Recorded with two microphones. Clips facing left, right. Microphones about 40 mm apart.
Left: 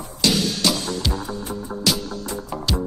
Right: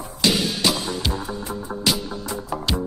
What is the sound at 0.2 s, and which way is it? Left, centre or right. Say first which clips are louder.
Music: even; centre.